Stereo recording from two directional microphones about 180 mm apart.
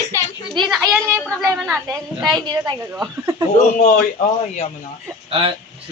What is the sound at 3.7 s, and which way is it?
Speech, 45° left (ahead or behind).